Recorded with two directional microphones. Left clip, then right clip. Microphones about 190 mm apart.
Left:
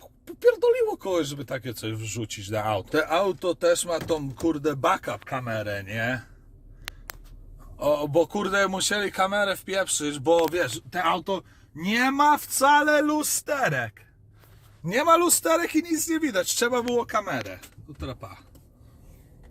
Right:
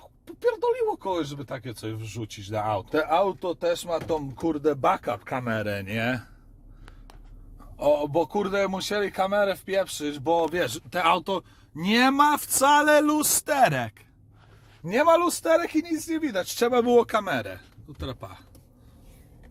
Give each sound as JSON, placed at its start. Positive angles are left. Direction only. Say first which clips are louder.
{"t": 0.3, "sound": "speech", "louder": "left 4 dB", "side_deg": 10}
{"t": 2.9, "sound": "speech", "louder": "right 1 dB", "side_deg": 0}
{"t": 4.4, "sound": "speech", "louder": "even", "side_deg": -20}
{"t": 5.3, "sound": "a man's voice", "louder": "left 1 dB", "side_deg": -50}
{"t": 7.9, "sound": "speech", "louder": "left 1 dB", "side_deg": 0}
{"t": 10.8, "sound": "speech", "louder": "right 2 dB", "side_deg": -25}
{"t": 11.8, "sound": "speech", "louder": "right 2 dB", "side_deg": -30}
{"t": 16.4, "sound": "speech", "louder": "even", "side_deg": -15}
{"t": 16.7, "sound": "speech", "louder": "right 5 dB", "side_deg": -55}